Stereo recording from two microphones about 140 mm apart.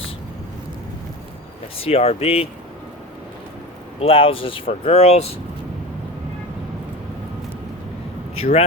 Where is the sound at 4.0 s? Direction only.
40° left (ahead or behind).